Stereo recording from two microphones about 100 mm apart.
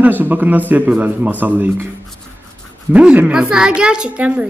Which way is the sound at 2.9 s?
15° right (ahead or behind).